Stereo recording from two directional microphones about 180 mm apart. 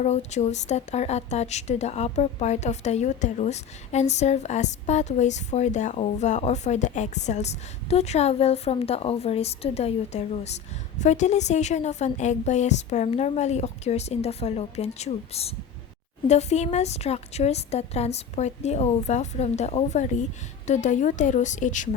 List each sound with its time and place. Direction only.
0.0 s a woman's voice: 40° left (ahead or behind)